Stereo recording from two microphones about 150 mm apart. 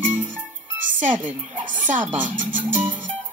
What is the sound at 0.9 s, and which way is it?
Speech, 55° right (ahead or behind).